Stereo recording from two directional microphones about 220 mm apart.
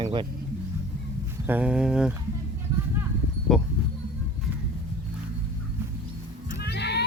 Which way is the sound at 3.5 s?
Centre (ahead or behind).